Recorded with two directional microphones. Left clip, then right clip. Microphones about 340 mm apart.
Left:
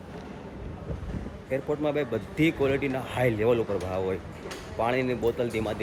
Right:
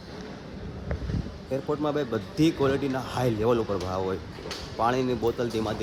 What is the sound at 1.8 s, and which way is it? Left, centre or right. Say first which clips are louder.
Speech: even; centre.